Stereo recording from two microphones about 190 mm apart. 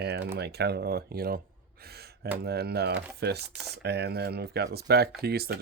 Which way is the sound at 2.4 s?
60° right (ahead or behind).